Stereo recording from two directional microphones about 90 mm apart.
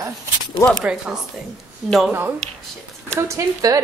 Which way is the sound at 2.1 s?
25° right (ahead or behind).